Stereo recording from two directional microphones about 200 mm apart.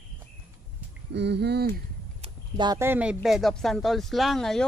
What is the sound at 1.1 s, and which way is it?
Speech, 55° right (ahead or behind).